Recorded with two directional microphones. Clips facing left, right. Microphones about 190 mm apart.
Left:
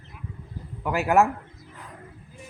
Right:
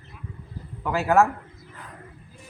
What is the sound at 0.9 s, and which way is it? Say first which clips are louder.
Speech: right 1 dB; 15° left (ahead or behind).